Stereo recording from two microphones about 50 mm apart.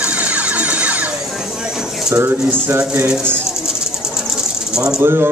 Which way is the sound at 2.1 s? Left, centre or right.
Right.